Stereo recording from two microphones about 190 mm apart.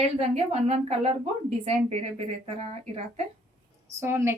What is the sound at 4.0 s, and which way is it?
Speech, 15° right (ahead or behind).